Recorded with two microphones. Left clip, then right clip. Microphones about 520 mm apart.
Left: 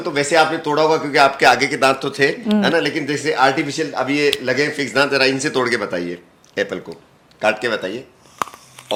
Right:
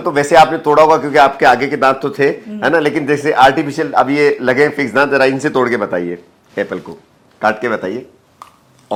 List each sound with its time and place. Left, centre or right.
0.0 s a man's voice: centre
7.4 s a man's voice: centre